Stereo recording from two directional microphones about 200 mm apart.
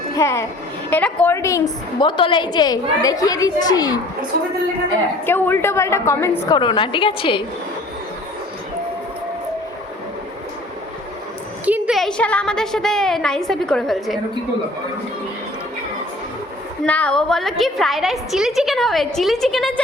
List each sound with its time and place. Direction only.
0.2 s a woman's voice: 15° left (ahead or behind)
5.2 s a woman's voice: 10° left (ahead or behind)
6.6 s a woman's voice: 25° left (ahead or behind)
11.6 s a woman's voice: 5° right (ahead or behind)
16.8 s a woman's voice: 5° left (ahead or behind)